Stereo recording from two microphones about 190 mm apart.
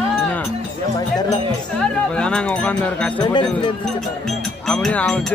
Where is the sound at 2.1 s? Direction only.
5° left (ahead or behind).